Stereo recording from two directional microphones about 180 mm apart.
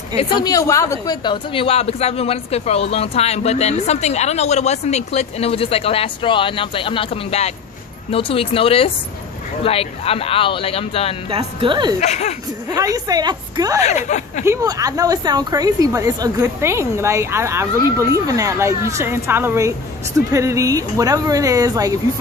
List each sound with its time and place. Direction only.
0.1 s a woman's voice: 30° left (ahead or behind)
11.2 s speech: 30° right (ahead or behind)
12.0 s a woman's voice: 40° left (ahead or behind)
12.6 s speech: 20° right (ahead or behind)
13.8 s a woman's voice: 40° left (ahead or behind)
14.4 s speech: 15° right (ahead or behind)